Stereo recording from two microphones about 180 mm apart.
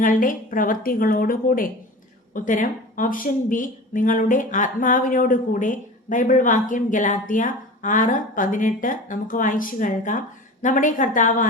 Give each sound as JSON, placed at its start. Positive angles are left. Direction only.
{"t": 0.0, "sound": "speech", "side_deg": 50}